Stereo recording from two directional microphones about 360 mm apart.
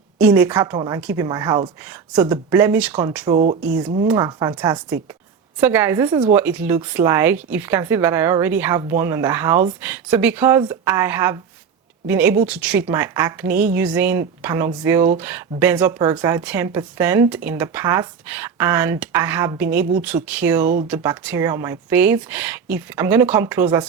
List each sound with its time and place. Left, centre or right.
0.3 s a woman's voice: centre